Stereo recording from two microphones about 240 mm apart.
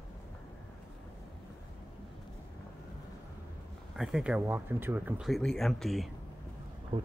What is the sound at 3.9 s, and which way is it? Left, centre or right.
Speech, centre.